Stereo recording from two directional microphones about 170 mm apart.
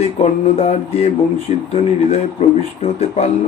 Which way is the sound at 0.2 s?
40° left (ahead or behind).